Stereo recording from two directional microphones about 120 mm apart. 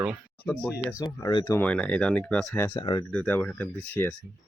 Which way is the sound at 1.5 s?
15° left (ahead or behind).